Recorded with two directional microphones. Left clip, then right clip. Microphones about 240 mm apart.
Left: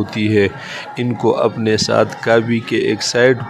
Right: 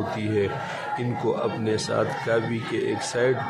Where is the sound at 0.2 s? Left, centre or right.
Left.